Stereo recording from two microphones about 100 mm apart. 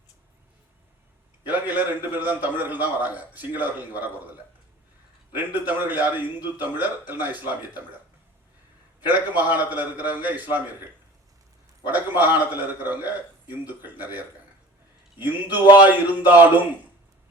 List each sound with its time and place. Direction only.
1.5 s a man's voice: 20° right (ahead or behind)
5.3 s a man's voice: 20° right (ahead or behind)
9.0 s a man's voice: 15° right (ahead or behind)
11.9 s a man's voice: 15° right (ahead or behind)